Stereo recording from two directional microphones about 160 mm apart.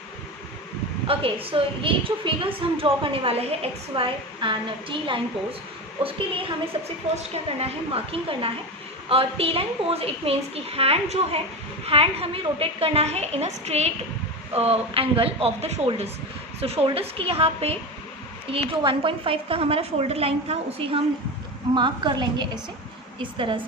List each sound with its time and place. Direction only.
1.0 s a woman's voice: 35° right (ahead or behind)